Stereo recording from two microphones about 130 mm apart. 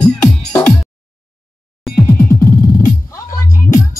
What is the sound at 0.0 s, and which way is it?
Music, 10° left (ahead or behind).